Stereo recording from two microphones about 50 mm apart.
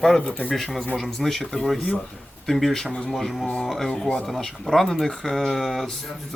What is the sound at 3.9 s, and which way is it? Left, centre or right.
Speech, left.